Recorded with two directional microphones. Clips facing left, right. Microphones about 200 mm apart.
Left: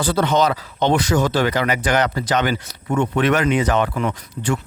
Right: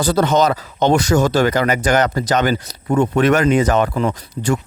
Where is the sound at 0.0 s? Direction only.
40° right (ahead or behind).